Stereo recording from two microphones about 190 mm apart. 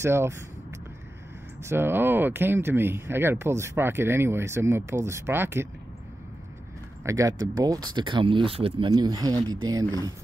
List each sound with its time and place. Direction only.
0.0 s speech: 15° right (ahead or behind)
7.0 s speech: 15° right (ahead or behind)